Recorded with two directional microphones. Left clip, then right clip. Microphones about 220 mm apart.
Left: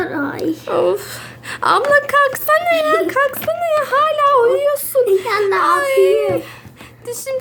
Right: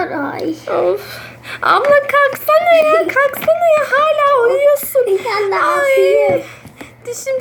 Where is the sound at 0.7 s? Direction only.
45° left (ahead or behind).